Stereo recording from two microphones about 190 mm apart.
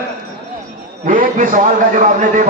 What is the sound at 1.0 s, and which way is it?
A man's voice, 45° right (ahead or behind).